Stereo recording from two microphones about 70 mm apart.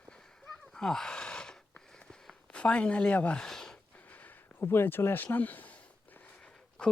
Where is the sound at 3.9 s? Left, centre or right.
Left.